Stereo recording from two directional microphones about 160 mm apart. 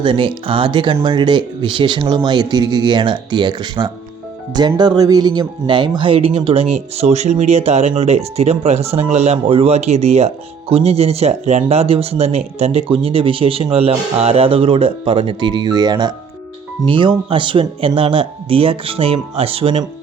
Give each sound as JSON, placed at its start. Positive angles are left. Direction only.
{"t": 0.0, "sound": "speech", "side_deg": -30}